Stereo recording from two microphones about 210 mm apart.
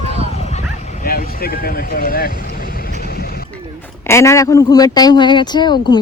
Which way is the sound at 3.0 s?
45° left (ahead or behind).